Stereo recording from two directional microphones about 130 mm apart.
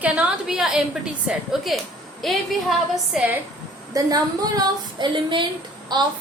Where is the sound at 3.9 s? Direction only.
30° right (ahead or behind).